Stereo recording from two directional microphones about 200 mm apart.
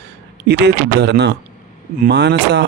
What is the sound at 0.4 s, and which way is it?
A man's voice, 55° right (ahead or behind).